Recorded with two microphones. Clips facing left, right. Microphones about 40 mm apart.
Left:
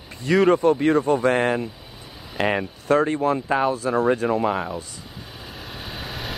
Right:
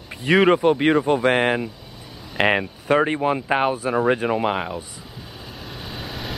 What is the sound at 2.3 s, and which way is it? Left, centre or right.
Speech, right.